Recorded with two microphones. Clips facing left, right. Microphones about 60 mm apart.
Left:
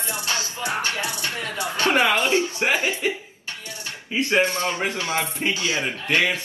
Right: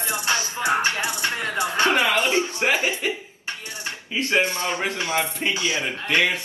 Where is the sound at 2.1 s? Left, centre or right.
Right.